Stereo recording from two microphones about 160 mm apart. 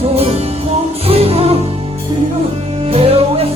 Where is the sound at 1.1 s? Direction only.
40° right (ahead or behind).